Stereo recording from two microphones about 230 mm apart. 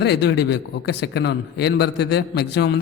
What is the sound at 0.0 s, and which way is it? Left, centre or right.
A man's voice, left.